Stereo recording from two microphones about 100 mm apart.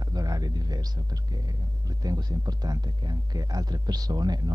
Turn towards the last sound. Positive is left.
turn(degrees=-45)  # may be behind; listen again after turning